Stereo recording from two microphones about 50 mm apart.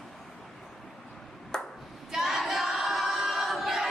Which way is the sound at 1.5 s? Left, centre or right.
Centre.